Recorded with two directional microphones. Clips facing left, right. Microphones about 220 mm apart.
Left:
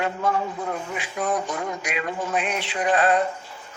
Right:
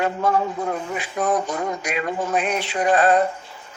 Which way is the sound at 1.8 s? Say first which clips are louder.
Right 3 dB; 40° right (ahead or behind).